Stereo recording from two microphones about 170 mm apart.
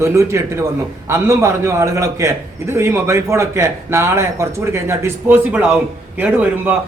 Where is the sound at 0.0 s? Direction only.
15° right (ahead or behind).